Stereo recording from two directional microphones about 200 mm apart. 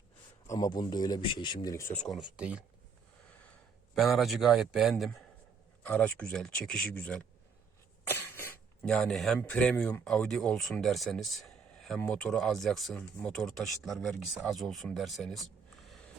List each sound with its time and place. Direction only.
0.4 s speech: 20° left (ahead or behind)
2.0 s speech: centre (ahead or behind)
3.9 s speech: centre (ahead or behind)
8.0 s cough: 10° left (ahead or behind)
9.4 s speech: 5° left (ahead or behind)
15.9 s a sound: 5° left (ahead or behind)